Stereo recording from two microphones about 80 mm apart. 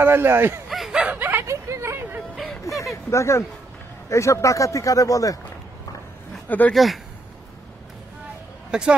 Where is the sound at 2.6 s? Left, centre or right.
Centre.